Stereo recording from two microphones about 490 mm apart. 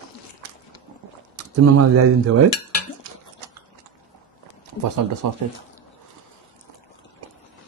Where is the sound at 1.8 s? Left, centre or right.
Right.